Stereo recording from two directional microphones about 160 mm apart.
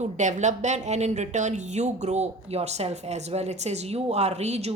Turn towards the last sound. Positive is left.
turn(degrees=-45)  # may be behind; listen again after turning